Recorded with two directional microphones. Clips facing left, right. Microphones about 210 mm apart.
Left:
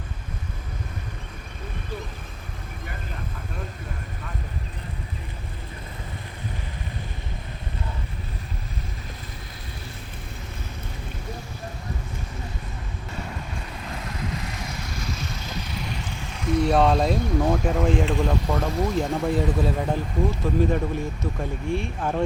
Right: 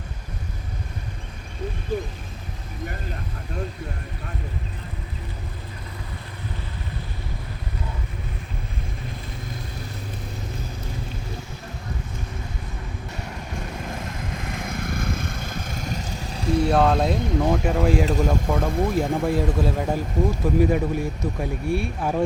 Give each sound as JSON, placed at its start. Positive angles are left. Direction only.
{"t": 13.9, "sound": "vehicle", "side_deg": -50}
{"t": 16.6, "sound": "speech", "side_deg": -5}
{"t": 18.0, "sound": "speech", "side_deg": -40}
{"t": 19.1, "sound": "speech", "side_deg": -5}